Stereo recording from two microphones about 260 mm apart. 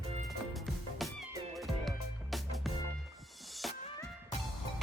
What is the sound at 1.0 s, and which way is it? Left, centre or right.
Music, centre.